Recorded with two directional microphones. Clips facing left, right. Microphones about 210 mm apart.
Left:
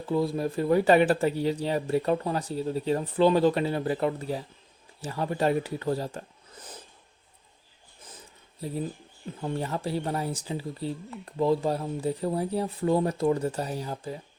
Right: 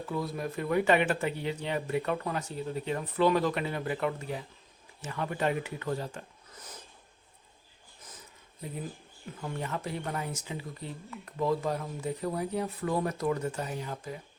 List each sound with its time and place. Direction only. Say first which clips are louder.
0.0 s speech: left 7 dB; 30° left (ahead or behind)
9.4 s speech: left 5 dB; 30° left (ahead or behind)